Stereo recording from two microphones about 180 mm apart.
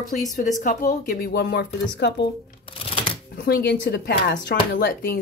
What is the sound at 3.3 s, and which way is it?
Speech, 60° left (ahead or behind).